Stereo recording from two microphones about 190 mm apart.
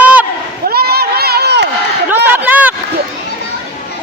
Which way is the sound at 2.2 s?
10° right (ahead or behind).